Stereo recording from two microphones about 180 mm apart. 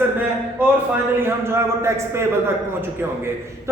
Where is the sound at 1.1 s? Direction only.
15° right (ahead or behind).